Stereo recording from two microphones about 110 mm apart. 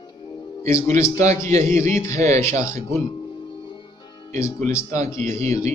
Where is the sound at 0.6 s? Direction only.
25° left (ahead or behind).